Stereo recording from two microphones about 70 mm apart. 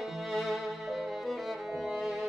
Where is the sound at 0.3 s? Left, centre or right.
Centre.